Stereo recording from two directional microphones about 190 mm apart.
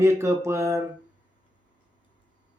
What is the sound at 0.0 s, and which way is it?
Speech, 15° right (ahead or behind).